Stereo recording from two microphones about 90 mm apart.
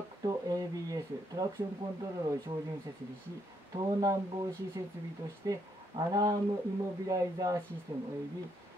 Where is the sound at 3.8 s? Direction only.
40° right (ahead or behind).